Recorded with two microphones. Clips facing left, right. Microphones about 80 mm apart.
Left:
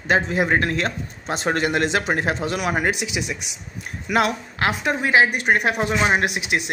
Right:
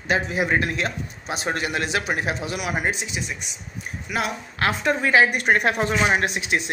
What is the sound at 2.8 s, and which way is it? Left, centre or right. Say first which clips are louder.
Speech: left 3 dB; left.